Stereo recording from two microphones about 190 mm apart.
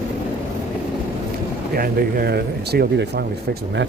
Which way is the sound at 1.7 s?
50° right (ahead or behind).